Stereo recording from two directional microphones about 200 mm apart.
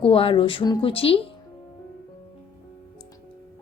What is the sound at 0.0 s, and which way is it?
A woman's voice, 25° left (ahead or behind).